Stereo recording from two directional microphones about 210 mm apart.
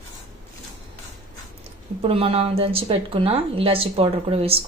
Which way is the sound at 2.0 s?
25° right (ahead or behind).